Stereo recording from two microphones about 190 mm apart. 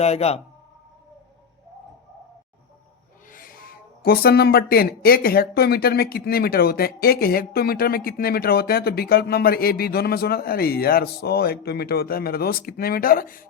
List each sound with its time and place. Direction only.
0.0 s speech: 35° left (ahead or behind)
3.2 s speech: 45° left (ahead or behind)